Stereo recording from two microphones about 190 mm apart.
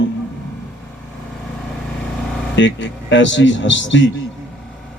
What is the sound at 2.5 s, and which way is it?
Speech, 75° left (ahead or behind).